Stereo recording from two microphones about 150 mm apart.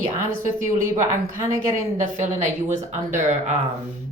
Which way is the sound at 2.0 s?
55° right (ahead or behind).